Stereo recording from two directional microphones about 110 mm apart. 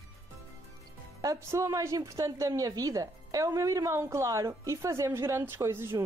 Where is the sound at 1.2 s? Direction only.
30° right (ahead or behind).